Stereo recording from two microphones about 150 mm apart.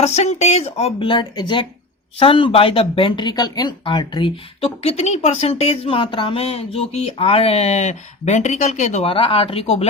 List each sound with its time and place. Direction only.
0.0 s speech: 45° left (ahead or behind)
9.0 s speech: 40° left (ahead or behind)